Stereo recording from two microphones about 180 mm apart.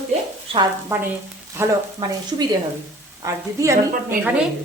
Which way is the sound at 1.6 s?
15° right (ahead or behind).